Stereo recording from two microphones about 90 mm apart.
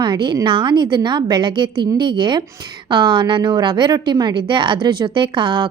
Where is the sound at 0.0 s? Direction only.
60° right (ahead or behind).